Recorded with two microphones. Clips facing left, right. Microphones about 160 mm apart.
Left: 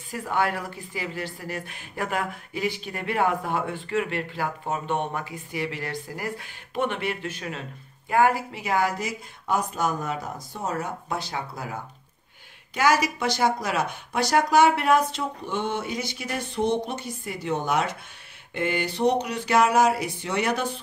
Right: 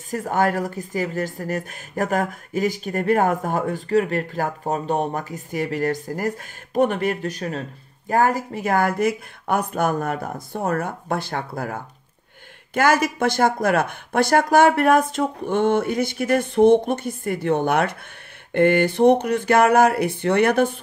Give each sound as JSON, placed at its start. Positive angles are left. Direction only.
{"t": 0.1, "sound": "speech", "side_deg": -45}